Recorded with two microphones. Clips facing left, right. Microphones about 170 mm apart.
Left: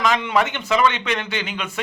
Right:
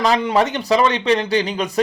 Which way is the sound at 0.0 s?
35° right (ahead or behind).